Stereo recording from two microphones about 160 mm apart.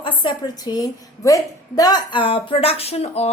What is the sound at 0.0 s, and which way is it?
A woman's voice, 30° left (ahead or behind).